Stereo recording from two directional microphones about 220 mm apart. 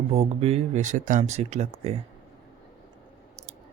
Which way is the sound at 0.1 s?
25° right (ahead or behind).